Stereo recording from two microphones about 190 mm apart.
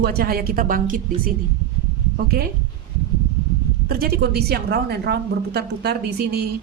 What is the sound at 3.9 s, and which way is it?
A woman's voice, 50° right (ahead or behind).